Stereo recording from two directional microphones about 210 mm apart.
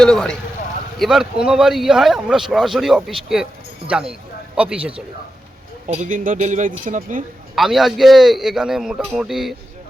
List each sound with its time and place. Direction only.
0.0 s speech: 5° left (ahead or behind)
5.9 s speech: 35° right (ahead or behind)
7.5 s speech: centre (ahead or behind)